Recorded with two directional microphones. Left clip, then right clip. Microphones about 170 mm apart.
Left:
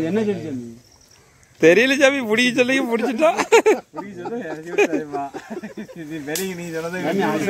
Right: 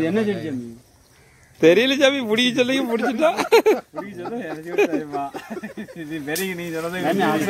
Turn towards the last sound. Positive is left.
turn(degrees=5)  # may be behind; listen again after turning